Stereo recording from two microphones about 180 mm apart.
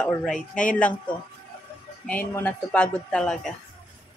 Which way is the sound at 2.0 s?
10° left (ahead or behind).